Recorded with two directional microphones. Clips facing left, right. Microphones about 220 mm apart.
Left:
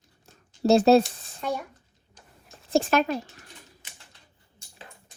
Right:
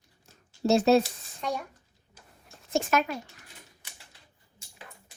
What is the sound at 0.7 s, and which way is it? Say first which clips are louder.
Speech: left 4 dB; 35° left (ahead or behind).